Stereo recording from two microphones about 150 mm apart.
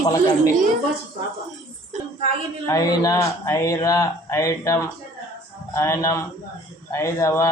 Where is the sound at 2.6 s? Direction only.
20° left (ahead or behind).